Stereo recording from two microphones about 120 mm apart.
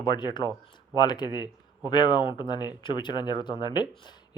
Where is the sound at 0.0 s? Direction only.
40° left (ahead or behind).